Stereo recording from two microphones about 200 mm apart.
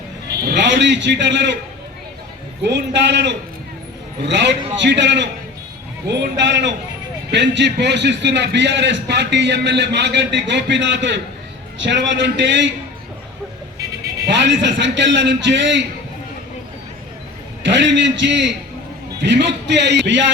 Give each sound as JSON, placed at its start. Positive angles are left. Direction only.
{"t": 0.4, "sound": "a man's voice", "side_deg": -60}
{"t": 2.6, "sound": "a man's voice", "side_deg": -60}
{"t": 14.3, "sound": "a man's voice", "side_deg": -60}
{"t": 17.7, "sound": "a man's voice", "side_deg": -65}